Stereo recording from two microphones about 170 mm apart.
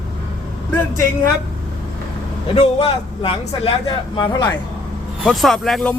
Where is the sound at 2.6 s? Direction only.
35° left (ahead or behind).